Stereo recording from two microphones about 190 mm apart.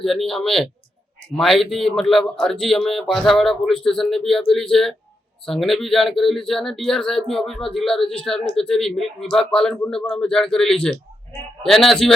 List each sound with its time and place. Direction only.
0.0 s speech: centre (ahead or behind)